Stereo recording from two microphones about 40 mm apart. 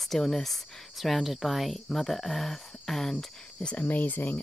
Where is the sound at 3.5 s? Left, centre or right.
Left.